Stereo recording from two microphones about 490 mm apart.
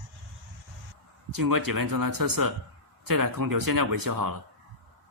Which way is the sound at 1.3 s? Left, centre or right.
Right.